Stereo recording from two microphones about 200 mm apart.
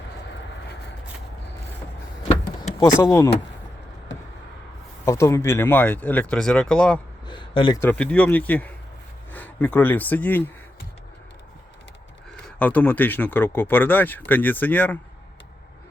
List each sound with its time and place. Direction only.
2.2 s vehicle: 30° left (ahead or behind)
3.0 s speech: 15° left (ahead or behind)
5.0 s speech: 15° left (ahead or behind)
7.3 s speech: 25° left (ahead or behind)
7.8 s speech: 5° left (ahead or behind)
12.5 s speech: 5° left (ahead or behind)